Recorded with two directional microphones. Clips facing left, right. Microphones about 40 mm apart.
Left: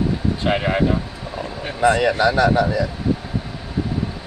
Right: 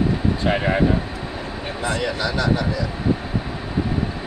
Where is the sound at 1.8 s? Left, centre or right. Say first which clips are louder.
Left 8 dB; left.